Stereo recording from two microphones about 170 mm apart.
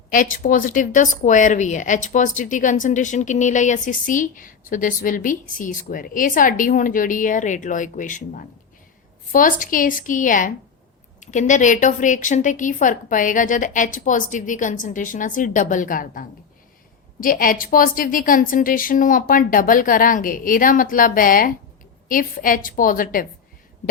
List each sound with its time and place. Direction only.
0.1 s a woman's voice: 55° left (ahead or behind)